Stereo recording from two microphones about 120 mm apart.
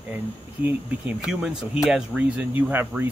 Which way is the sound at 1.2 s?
5° right (ahead or behind).